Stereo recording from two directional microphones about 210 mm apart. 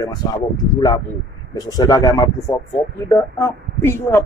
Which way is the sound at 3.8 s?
10° left (ahead or behind).